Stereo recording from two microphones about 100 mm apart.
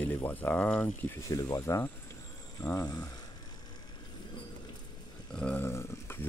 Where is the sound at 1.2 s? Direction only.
35° left (ahead or behind).